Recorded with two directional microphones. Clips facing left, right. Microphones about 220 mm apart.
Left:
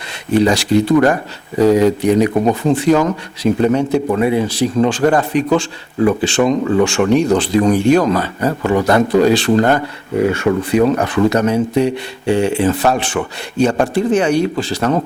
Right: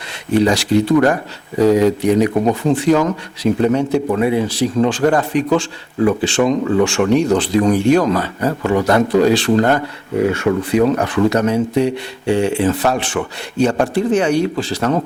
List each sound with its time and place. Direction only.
0.3 s speech: 10° left (ahead or behind)
14.8 s speech: 25° left (ahead or behind)